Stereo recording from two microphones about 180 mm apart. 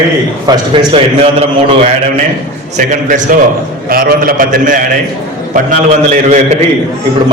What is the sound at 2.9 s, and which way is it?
A man's voice, 45° right (ahead or behind).